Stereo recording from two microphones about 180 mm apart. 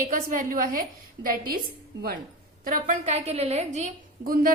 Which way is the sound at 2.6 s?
45° right (ahead or behind).